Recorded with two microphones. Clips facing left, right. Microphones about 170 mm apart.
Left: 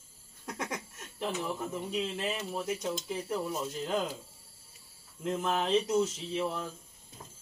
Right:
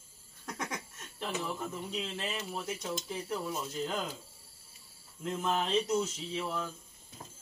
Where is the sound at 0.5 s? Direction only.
10° left (ahead or behind).